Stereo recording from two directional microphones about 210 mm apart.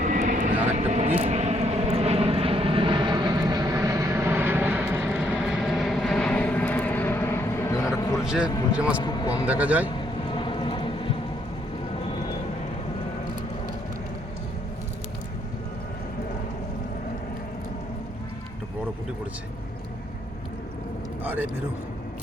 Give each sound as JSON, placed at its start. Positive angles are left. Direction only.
{"t": 0.0, "sound": "vehicle", "side_deg": -35}
{"t": 7.9, "sound": "music", "side_deg": 15}
{"t": 8.2, "sound": "a sound", "side_deg": -5}
{"t": 8.7, "sound": "speech", "side_deg": -5}
{"t": 9.0, "sound": "a man's voice", "side_deg": 20}
{"t": 9.5, "sound": "a man's voice", "side_deg": -5}
{"t": 10.3, "sound": "boat", "side_deg": 25}